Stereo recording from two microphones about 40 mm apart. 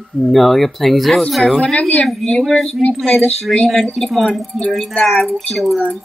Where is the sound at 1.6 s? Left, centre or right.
Left.